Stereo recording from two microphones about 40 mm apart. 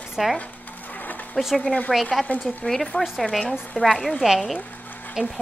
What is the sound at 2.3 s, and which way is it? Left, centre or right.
Speech, left.